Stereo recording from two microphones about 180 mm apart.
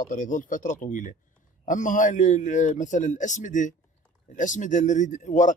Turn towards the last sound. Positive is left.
turn(degrees=45)  # may be behind; listen again after turning